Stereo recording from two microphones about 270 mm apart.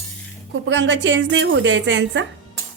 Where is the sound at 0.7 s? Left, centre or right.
Right.